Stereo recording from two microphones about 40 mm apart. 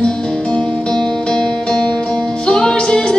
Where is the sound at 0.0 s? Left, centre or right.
Left.